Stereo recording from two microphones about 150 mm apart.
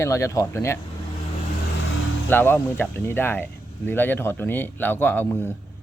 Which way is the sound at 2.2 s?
15° left (ahead or behind).